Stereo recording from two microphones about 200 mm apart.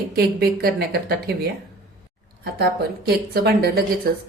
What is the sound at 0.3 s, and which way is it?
Speech, 50° right (ahead or behind).